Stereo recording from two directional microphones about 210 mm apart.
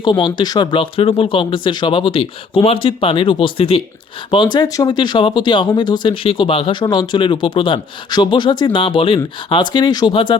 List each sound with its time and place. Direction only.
0.0 s speech: 20° left (ahead or behind)